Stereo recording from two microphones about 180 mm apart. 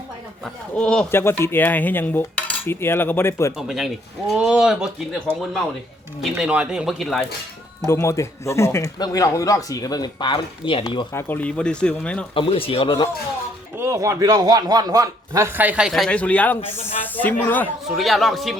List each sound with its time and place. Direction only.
0.4 s speech: 5° left (ahead or behind)
3.7 s speech: centre (ahead or behind)
7.9 s speech: 15° left (ahead or behind)
11.1 s speech: 10° left (ahead or behind)
12.3 s a man's voice: 30° left (ahead or behind)
13.7 s speech: 15° right (ahead or behind); by 18.5 s centre (ahead or behind)